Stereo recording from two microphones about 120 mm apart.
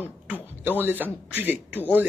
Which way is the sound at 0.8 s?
15° right (ahead or behind).